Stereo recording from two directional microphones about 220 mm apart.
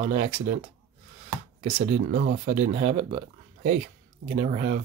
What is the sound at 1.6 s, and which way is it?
Speech, 30° right (ahead or behind).